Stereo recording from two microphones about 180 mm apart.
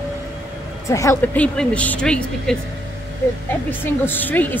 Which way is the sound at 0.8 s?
15° left (ahead or behind).